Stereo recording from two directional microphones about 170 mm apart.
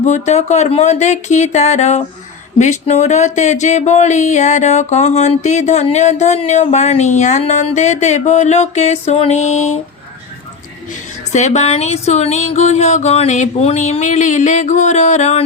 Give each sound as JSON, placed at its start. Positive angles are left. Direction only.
{"t": 0.0, "sound": "speech", "side_deg": 45}
{"t": 11.3, "sound": "speech", "side_deg": 45}